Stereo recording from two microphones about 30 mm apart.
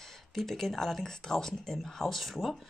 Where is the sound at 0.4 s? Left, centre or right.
Centre.